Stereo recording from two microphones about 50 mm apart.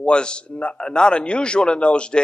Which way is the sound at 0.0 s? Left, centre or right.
Centre.